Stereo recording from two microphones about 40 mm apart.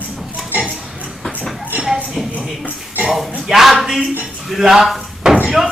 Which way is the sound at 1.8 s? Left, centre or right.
Centre.